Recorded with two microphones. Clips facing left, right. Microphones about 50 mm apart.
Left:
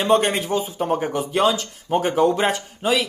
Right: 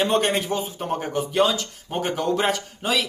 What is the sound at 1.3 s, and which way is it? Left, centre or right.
Speech, left.